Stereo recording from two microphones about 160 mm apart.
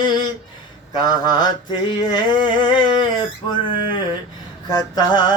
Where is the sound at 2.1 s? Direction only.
30° left (ahead or behind).